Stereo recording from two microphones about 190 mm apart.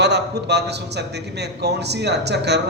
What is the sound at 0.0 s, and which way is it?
A man's voice, 60° right (ahead or behind).